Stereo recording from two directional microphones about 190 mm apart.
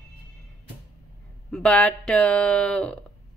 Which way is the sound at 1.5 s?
5° left (ahead or behind).